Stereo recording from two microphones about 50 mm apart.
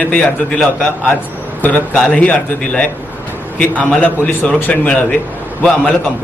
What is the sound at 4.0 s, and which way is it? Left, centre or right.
A man's voice, left.